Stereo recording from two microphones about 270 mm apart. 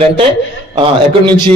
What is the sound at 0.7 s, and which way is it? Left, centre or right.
Speech, centre.